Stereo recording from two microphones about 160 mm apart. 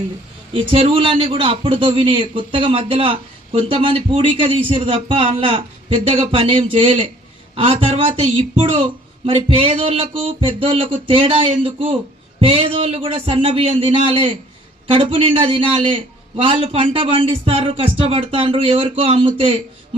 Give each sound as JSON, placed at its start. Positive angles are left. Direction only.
{"t": 0.5, "sound": "a man's voice", "side_deg": -35}